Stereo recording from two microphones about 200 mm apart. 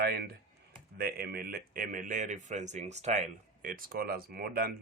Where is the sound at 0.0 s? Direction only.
50° right (ahead or behind).